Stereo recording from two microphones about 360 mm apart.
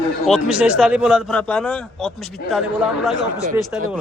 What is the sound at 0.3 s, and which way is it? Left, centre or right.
A man's voice, centre.